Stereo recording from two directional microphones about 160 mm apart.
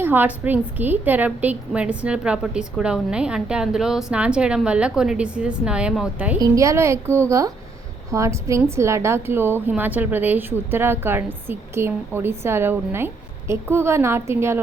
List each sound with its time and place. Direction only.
0.0 s a woman's voice: 10° right (ahead or behind)
6.4 s a woman's voice: 20° right (ahead or behind)